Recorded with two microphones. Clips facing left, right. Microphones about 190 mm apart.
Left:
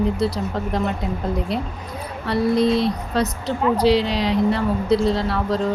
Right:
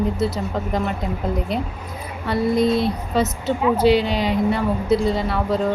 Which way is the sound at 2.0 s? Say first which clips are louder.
Left 1 dB; centre (ahead or behind).